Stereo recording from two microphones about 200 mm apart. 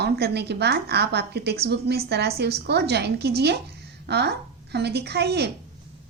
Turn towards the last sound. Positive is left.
turn(degrees=-55)  # may be behind; listen again after turning